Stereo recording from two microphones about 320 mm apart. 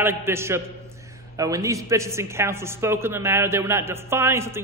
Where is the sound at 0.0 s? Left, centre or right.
Centre.